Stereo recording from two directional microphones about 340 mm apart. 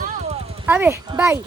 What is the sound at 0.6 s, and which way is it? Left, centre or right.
Speech, centre.